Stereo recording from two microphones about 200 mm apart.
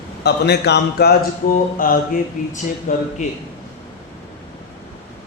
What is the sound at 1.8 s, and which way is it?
A man's voice, 45° left (ahead or behind).